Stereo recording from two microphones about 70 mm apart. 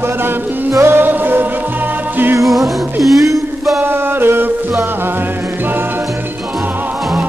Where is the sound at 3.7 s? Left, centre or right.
Right.